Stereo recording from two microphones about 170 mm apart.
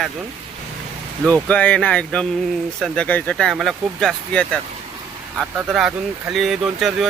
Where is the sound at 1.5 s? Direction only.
5° left (ahead or behind).